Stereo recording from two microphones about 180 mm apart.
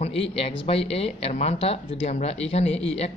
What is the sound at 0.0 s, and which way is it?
Speech, 35° left (ahead or behind).